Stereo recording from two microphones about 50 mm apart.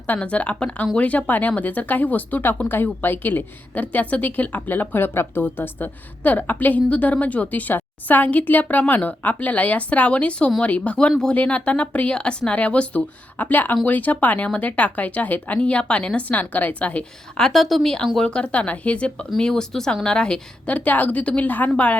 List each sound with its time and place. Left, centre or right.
0.1 s a woman's voice: left
6.2 s a woman's voice: left
17.4 s a woman's voice: centre
18.2 s a woman's voice: centre
19.4 s a woman's voice: centre